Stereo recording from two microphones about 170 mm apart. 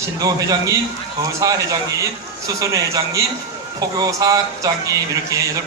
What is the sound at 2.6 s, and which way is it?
A man's voice, 20° right (ahead or behind).